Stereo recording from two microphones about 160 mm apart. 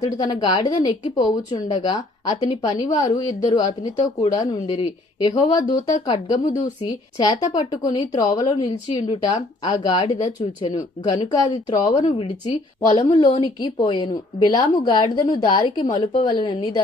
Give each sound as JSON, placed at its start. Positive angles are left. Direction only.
{"t": 0.0, "sound": "a woman's voice", "side_deg": 25}
{"t": 13.2, "sound": "a woman's voice", "side_deg": 25}